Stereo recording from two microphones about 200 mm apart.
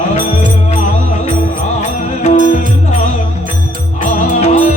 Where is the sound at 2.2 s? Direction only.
40° left (ahead or behind).